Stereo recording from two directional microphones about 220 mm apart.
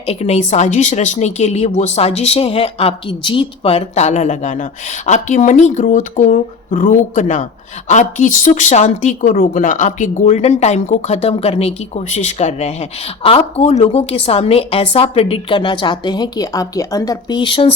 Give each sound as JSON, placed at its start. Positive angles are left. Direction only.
{"t": 0.0, "sound": "speech", "side_deg": 30}